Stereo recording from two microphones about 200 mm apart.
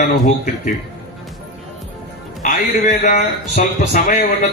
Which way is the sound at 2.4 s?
40° left (ahead or behind).